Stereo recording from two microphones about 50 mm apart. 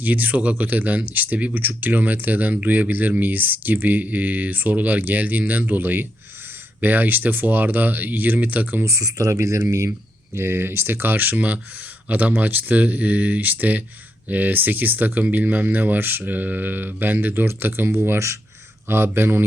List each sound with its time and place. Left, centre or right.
0.0 s speech: right
8.8 s speech: right
10.3 s speech: right
18.9 s speech: right